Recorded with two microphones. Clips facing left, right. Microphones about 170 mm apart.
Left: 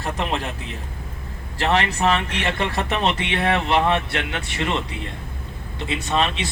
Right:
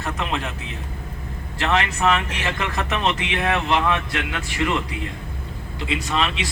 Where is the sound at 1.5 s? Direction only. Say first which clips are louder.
Left 1 dB; 35° left (ahead or behind).